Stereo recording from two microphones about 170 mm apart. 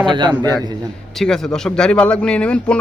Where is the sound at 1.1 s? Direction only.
5° left (ahead or behind).